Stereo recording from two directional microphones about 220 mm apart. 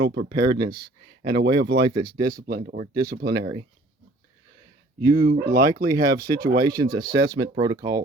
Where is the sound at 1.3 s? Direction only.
50° right (ahead or behind).